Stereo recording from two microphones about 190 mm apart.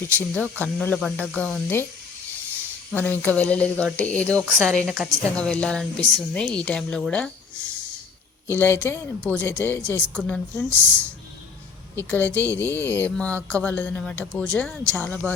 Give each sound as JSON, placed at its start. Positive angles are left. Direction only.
{"t": 0.1, "sound": "speech", "side_deg": 10}
{"t": 2.9, "sound": "speech", "side_deg": 10}
{"t": 8.4, "sound": "speech", "side_deg": 10}